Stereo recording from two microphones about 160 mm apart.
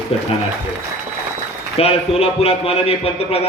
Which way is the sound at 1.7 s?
40° left (ahead or behind).